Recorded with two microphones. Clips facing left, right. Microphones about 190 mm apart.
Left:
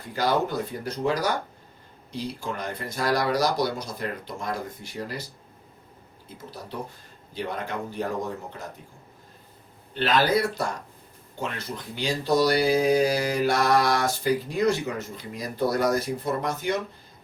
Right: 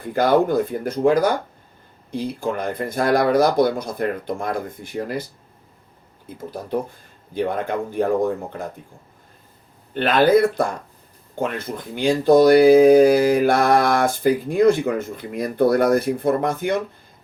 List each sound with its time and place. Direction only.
0.0 s speech: 55° right (ahead or behind)
6.2 s speech: 50° right (ahead or behind)
9.9 s speech: 55° right (ahead or behind)